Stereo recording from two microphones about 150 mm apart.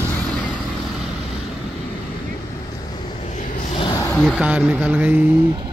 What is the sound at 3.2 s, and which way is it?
Vehicle, 55° left (ahead or behind).